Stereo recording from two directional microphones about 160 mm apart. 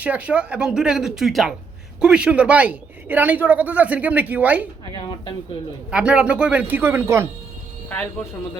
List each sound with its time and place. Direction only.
0.0 s a man's voice: 10° right (ahead or behind)
4.9 s speech: 25° left (ahead or behind)
5.9 s a man's voice: 5° right (ahead or behind)
7.9 s speech: 10° left (ahead or behind)